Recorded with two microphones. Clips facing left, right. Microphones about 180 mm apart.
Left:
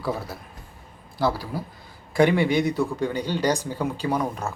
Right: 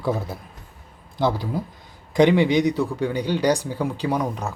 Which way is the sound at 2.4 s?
15° right (ahead or behind).